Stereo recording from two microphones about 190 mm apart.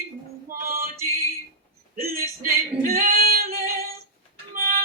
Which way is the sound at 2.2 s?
50° right (ahead or behind).